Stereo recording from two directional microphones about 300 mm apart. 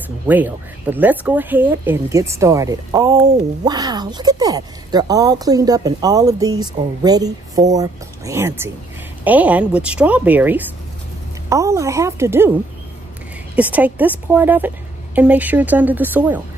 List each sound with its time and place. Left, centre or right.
0.3 s speech: centre
13.6 s speech: centre